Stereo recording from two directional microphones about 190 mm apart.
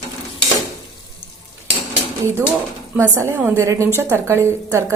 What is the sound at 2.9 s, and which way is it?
A woman's voice, 10° right (ahead or behind).